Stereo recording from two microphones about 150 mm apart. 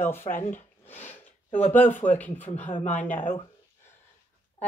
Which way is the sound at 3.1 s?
60° left (ahead or behind).